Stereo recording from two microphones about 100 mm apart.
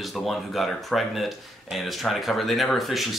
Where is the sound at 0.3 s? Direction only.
Centre (ahead or behind).